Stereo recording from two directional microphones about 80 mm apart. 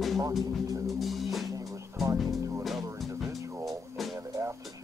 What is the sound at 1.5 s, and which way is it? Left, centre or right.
Music, right.